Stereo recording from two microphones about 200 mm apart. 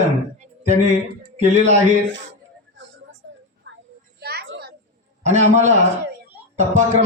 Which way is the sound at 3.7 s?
70° right (ahead or behind).